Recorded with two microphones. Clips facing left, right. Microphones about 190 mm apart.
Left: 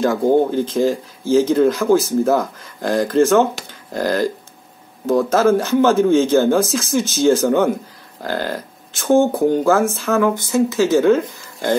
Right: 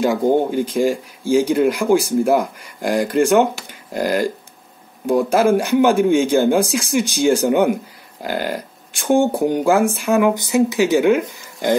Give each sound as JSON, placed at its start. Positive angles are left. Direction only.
{"t": 0.0, "sound": "speech", "side_deg": -15}